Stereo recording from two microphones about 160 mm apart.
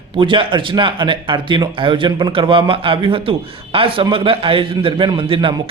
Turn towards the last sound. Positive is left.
turn(degrees=-30)  # may be behind; listen again after turning